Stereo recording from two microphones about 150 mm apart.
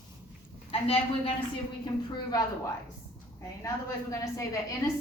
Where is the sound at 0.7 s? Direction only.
40° left (ahead or behind).